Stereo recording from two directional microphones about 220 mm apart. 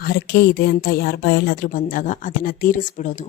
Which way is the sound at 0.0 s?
50° left (ahead or behind).